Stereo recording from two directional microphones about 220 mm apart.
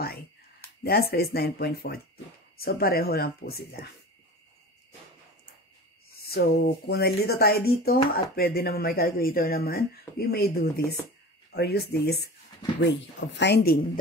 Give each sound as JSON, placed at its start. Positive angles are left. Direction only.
{"t": 0.8, "sound": "speech", "side_deg": 45}
{"t": 6.2, "sound": "speech", "side_deg": 45}